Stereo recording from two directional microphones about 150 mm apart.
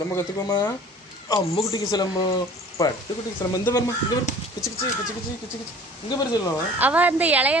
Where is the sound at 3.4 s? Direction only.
25° left (ahead or behind).